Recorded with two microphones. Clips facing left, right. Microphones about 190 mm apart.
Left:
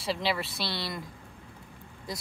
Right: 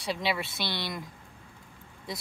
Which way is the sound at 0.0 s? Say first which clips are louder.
Left 1 dB; centre (ahead or behind).